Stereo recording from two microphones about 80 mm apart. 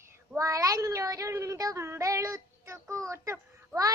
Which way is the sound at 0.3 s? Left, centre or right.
Right.